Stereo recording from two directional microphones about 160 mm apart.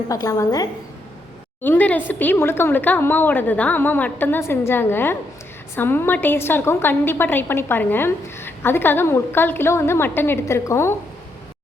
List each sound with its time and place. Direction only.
0.1 s a woman's voice: 20° left (ahead or behind)
1.6 s a woman's voice: 10° left (ahead or behind)